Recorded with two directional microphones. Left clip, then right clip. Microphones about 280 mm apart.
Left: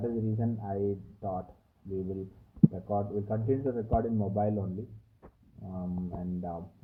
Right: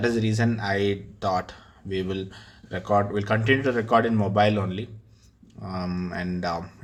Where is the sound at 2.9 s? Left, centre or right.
Right.